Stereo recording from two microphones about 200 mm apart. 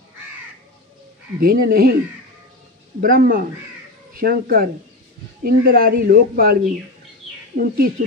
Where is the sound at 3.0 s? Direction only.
45° right (ahead or behind).